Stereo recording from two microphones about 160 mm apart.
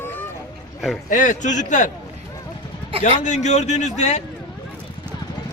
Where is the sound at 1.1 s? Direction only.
50° left (ahead or behind).